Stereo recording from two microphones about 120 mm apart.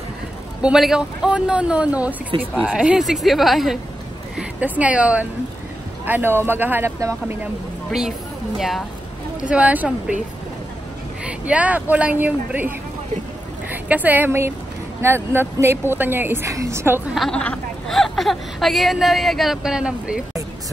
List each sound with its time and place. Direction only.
0.6 s a woman's voice: 5° right (ahead or behind)
4.4 s speech: 10° right (ahead or behind)
8.5 s a woman's voice: centre (ahead or behind)
9.5 s speech: 10° right (ahead or behind)
11.2 s a woman's voice: 10° right (ahead or behind)
17.1 s a woman's voice: centre (ahead or behind)